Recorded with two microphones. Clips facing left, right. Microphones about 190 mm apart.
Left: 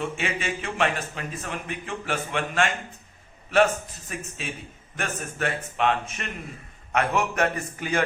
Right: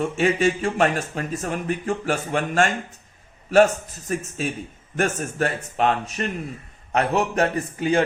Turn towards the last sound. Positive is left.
turn(degrees=-30)  # may be behind; listen again after turning